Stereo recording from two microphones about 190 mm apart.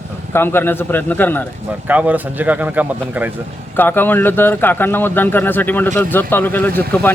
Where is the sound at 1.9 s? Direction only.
10° right (ahead or behind).